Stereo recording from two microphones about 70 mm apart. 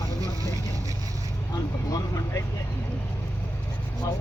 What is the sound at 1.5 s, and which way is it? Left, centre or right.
Speech, left.